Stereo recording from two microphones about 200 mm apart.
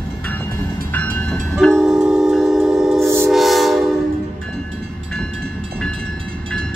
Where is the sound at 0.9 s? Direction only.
10° left (ahead or behind).